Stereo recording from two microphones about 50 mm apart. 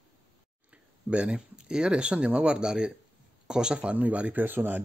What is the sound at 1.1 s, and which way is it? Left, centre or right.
Speech, right.